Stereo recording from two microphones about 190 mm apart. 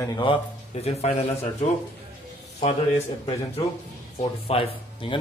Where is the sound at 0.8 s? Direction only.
35° left (ahead or behind).